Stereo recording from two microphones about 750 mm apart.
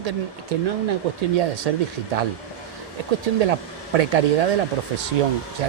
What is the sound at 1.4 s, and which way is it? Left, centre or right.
Speech, right.